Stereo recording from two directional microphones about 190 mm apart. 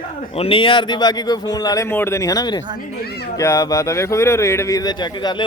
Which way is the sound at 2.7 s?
55° left (ahead or behind).